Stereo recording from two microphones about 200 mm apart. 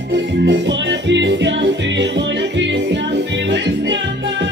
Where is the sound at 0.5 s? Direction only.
60° right (ahead or behind).